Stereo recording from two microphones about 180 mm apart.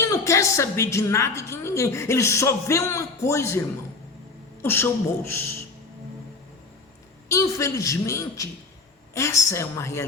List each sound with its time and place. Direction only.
0.0 s a woman's voice: 15° left (ahead or behind)
4.6 s a woman's voice: 10° left (ahead or behind)
7.3 s a woman's voice: 15° left (ahead or behind)